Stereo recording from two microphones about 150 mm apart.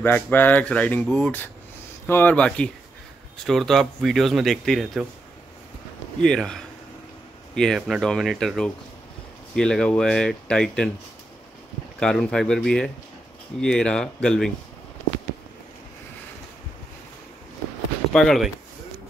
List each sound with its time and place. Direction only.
0.0 s speech: 15° left (ahead or behind)
6.2 s speech: 5° left (ahead or behind)
12.0 s speech: 5° left (ahead or behind)
18.1 s speech: centre (ahead or behind)